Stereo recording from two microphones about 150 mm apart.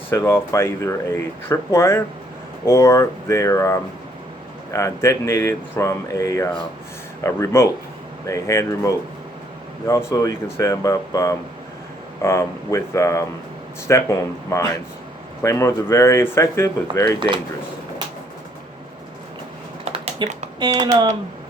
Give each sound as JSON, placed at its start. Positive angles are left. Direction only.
{"t": 0.1, "sound": "speech", "side_deg": 20}
{"t": 10.1, "sound": "speech", "side_deg": 20}
{"t": 17.2, "sound": "speech", "side_deg": -30}
{"t": 19.8, "sound": "typing", "side_deg": -35}